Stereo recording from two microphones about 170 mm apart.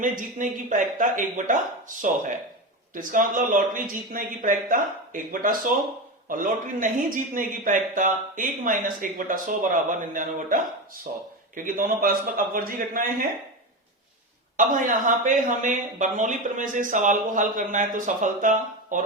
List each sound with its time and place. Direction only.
0.0 s speech: 50° right (ahead or behind)
11.1 s speech: 60° right (ahead or behind)
14.5 s speech: 50° right (ahead or behind)